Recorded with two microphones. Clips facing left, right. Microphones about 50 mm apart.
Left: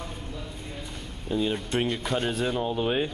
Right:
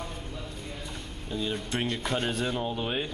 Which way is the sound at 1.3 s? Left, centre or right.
Centre.